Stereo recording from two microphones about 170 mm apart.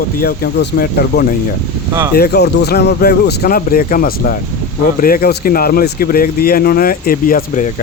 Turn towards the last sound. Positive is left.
turn(degrees=50)  # may be behind; listen again after turning